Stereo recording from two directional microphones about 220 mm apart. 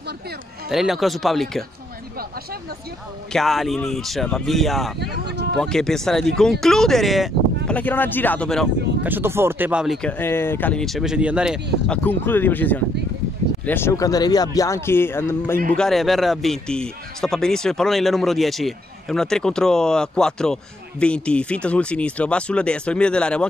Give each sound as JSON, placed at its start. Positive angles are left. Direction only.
{"t": 0.7, "sound": "a man's voice", "side_deg": 0}
{"t": 3.3, "sound": "a man's voice", "side_deg": 0}
{"t": 5.0, "sound": "speech", "side_deg": -50}
{"t": 5.6, "sound": "a man's voice", "side_deg": 0}
{"t": 9.0, "sound": "a man's voice", "side_deg": -10}
{"t": 12.0, "sound": "a man's voice", "side_deg": 10}